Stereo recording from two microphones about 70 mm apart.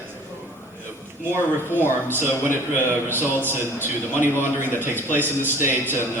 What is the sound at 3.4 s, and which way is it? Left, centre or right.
Speech, left.